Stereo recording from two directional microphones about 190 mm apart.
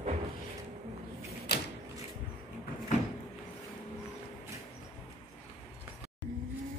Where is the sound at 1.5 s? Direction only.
55° left (ahead or behind).